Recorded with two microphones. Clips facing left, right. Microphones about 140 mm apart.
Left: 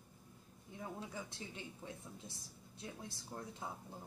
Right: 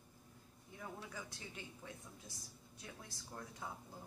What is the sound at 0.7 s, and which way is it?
Speech, 25° left (ahead or behind).